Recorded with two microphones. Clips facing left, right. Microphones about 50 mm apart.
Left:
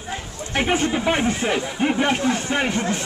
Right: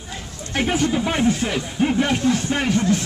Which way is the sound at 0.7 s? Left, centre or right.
Left.